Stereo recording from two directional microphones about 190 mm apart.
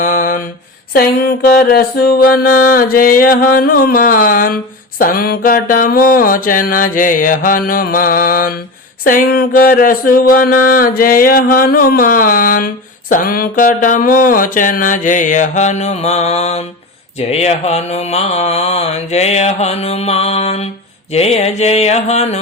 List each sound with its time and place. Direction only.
0.0 s mantra: 45° left (ahead or behind)
1.5 s music: 50° left (ahead or behind); by 16.6 s 35° left (ahead or behind)
17.2 s mantra: 35° left (ahead or behind)